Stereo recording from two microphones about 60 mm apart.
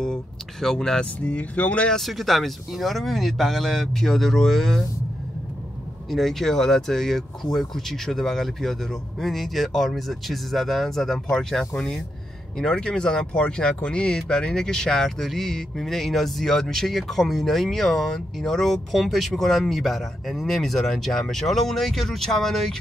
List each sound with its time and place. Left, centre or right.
0.0 s speech: centre
1.2 s speech: left
1.9 s speech: centre
6.0 s speech: centre